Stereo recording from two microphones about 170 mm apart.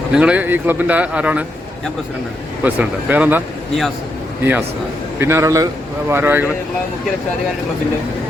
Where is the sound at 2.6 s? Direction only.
10° right (ahead or behind).